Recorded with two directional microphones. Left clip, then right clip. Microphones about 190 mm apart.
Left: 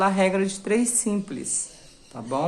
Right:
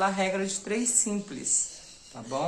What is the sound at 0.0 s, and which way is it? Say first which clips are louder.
Speech: left 5 dB; 35° left (ahead or behind).